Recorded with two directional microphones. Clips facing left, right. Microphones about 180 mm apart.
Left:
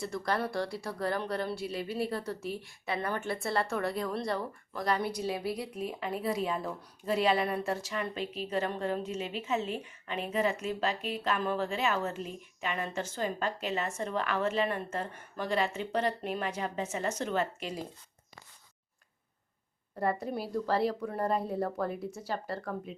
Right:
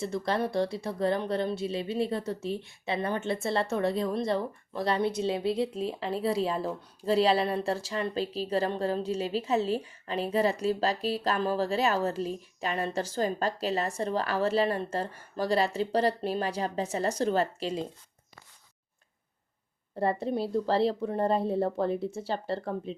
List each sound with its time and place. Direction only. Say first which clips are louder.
0.0 s speech: right 3 dB; 25° right (ahead or behind)
20.0 s a woman's voice: right 4 dB; 25° right (ahead or behind)